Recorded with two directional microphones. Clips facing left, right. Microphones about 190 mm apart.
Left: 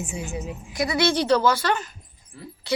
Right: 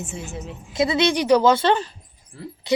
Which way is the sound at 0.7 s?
25° right (ahead or behind).